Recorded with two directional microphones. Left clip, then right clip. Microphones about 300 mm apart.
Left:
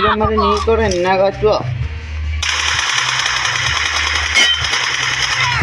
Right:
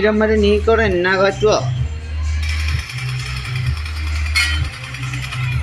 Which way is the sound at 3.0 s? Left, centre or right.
Left.